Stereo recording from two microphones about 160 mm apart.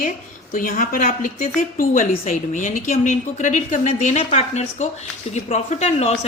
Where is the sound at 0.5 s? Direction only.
55° left (ahead or behind).